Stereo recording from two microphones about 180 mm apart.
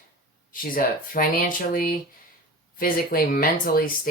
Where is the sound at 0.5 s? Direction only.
50° left (ahead or behind).